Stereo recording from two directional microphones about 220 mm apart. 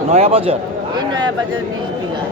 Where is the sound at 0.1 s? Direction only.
25° right (ahead or behind).